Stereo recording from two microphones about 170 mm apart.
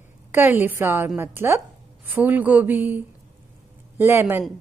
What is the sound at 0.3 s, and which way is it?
A woman's voice, 10° right (ahead or behind).